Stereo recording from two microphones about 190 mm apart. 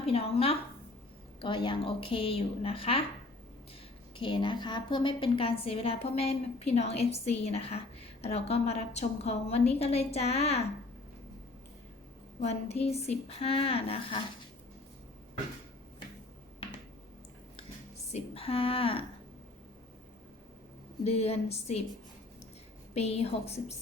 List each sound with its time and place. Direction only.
0.0 s a woman's voice: 30° left (ahead or behind)
4.2 s a woman's voice: 25° left (ahead or behind)
12.4 s a woman's voice: 35° left (ahead or behind)
18.1 s a woman's voice: 30° left (ahead or behind)
21.0 s a woman's voice: 35° left (ahead or behind)
23.0 s a woman's voice: 35° left (ahead or behind)